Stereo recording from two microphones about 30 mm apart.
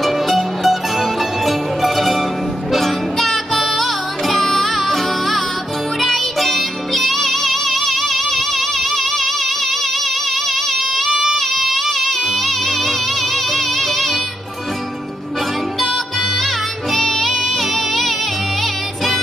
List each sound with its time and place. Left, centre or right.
0.0 s music: centre
11.1 s child singing: centre
11.3 s music: centre
16.9 s music: centre